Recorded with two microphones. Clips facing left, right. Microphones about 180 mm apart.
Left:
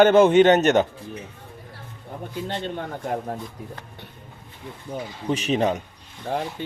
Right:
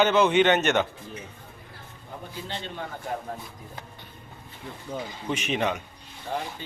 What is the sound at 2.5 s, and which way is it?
Speech, 55° left (ahead or behind).